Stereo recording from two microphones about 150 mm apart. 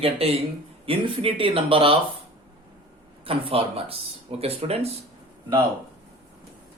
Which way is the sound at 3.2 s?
40° right (ahead or behind).